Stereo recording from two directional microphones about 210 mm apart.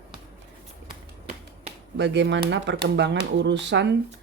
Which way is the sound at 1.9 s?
55° right (ahead or behind).